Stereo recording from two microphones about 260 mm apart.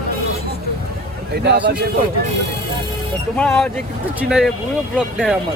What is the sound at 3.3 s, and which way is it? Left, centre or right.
Speech, centre.